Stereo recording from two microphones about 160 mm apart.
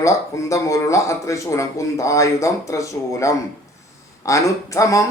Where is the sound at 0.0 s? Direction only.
20° left (ahead or behind).